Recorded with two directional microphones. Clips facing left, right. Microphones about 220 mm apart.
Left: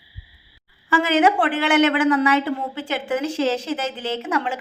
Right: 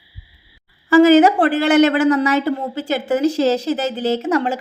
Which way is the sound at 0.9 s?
40° right (ahead or behind).